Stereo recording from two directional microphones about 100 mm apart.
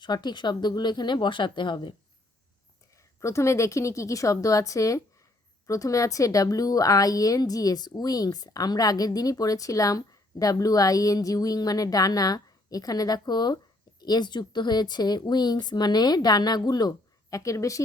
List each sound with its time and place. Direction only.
0.0 s speech: 45° left (ahead or behind)
3.2 s a woman's voice: 30° left (ahead or behind)
17.3 s a woman's voice: 30° left (ahead or behind)